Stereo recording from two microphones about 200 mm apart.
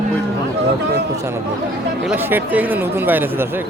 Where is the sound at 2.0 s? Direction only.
10° right (ahead or behind).